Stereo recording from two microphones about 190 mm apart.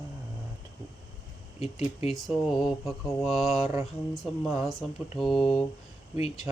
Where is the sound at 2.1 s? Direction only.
Centre (ahead or behind).